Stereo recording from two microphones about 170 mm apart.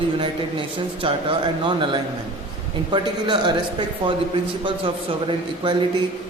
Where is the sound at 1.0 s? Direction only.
30° right (ahead or behind).